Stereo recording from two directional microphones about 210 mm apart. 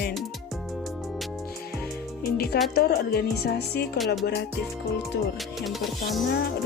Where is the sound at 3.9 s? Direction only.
Centre (ahead or behind).